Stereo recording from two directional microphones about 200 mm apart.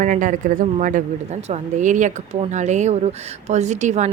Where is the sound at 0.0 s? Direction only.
40° right (ahead or behind).